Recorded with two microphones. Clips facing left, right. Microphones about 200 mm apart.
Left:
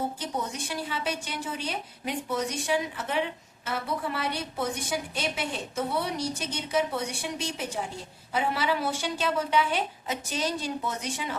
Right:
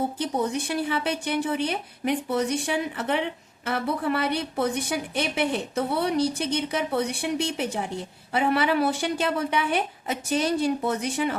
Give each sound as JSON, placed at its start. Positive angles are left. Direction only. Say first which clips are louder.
{"t": 0.2, "sound": "a woman's voice", "louder": "right 7 dB", "side_deg": -60}